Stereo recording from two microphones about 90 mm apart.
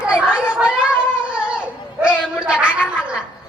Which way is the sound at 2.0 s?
10° right (ahead or behind).